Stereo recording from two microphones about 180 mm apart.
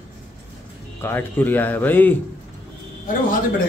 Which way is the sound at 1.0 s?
10° left (ahead or behind).